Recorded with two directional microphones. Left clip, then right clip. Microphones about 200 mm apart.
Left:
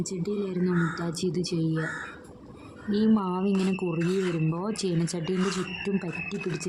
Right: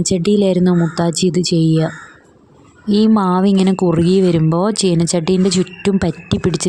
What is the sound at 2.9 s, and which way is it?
Speech, 45° right (ahead or behind).